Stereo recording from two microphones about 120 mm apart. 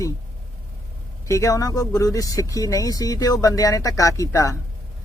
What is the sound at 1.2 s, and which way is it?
Speech, 25° left (ahead or behind).